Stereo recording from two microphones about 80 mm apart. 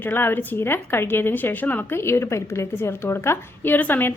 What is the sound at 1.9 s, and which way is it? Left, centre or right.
A woman's voice, left.